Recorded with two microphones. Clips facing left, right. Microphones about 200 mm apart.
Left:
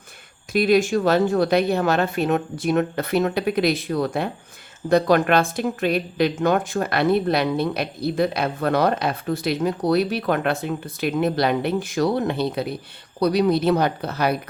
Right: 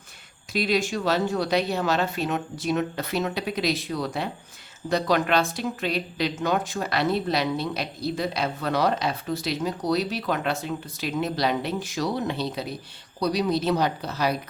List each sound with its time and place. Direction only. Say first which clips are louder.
0.5 s a woman's voice: left 7 dB; 50° left (ahead or behind)